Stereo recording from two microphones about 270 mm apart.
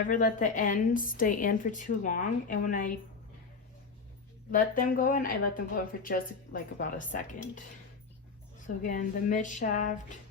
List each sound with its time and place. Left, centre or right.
0.0 s a woman's voice: left
4.5 s a woman's voice: left